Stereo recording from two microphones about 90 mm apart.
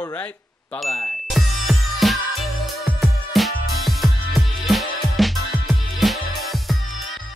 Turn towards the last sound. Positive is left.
turn(degrees=0)  # may be behind; listen again after turning